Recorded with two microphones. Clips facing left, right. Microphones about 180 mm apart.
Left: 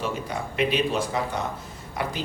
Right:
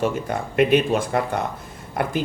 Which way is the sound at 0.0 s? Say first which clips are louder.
Right 6 dB; 50° right (ahead or behind).